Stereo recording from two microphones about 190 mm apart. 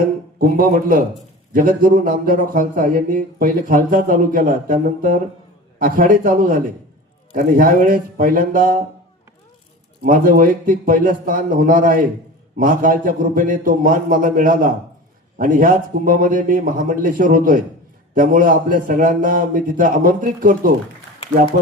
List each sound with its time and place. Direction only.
0.3 s speech: 50° right (ahead or behind)
10.0 s speech: 45° right (ahead or behind)